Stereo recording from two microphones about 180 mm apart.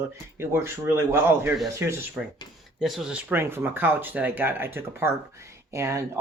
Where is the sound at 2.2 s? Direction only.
Centre (ahead or behind).